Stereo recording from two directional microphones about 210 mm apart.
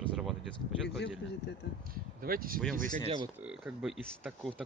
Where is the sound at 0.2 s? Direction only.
Centre (ahead or behind).